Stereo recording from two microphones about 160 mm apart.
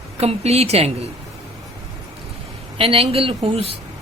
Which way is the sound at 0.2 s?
40° right (ahead or behind).